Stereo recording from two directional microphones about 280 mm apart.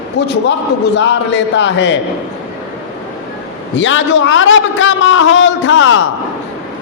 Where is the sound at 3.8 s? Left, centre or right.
Left.